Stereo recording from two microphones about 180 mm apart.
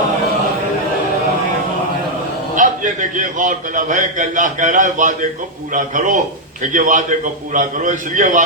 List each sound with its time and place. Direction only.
2.6 s a man's voice: 45° right (ahead or behind)